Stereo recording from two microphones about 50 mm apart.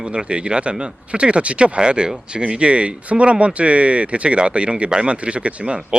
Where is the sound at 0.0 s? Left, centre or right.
Centre.